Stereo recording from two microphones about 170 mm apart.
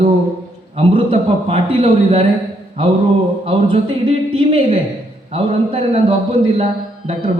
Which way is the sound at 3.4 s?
35° right (ahead or behind).